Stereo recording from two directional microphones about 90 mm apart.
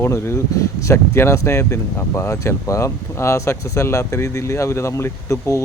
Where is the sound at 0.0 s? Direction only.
25° left (ahead or behind).